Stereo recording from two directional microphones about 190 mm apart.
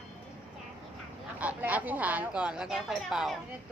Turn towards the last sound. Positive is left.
turn(degrees=0)  # may be behind; listen again after turning